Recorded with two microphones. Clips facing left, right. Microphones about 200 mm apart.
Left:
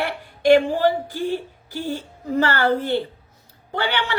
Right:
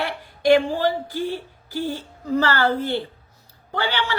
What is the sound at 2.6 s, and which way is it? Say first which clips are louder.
A woman's voice: left 2 dB; 15° left (ahead or behind).